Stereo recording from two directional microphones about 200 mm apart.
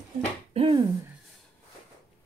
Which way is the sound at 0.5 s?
30° right (ahead or behind).